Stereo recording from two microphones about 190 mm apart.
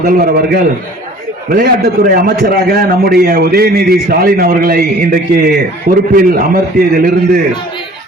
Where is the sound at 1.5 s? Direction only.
50° right (ahead or behind).